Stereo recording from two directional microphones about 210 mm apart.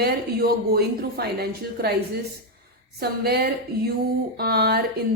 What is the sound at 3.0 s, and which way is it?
Speech, 50° right (ahead or behind).